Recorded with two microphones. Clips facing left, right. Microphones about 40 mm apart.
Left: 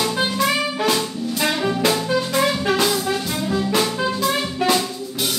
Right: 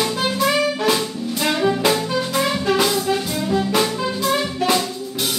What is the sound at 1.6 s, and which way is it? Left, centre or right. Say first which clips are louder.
Music: right 3 dB; centre.